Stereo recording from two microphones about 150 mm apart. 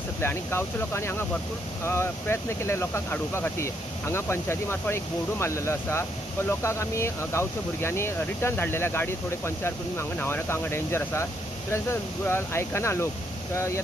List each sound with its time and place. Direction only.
0.2 s speech: 15° left (ahead or behind)